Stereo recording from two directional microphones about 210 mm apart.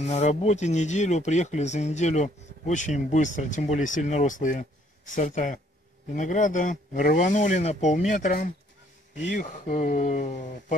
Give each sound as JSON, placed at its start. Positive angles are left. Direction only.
{"t": 0.0, "sound": "speech", "side_deg": 30}